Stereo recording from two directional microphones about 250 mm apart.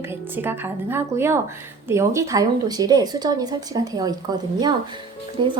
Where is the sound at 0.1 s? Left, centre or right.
Centre.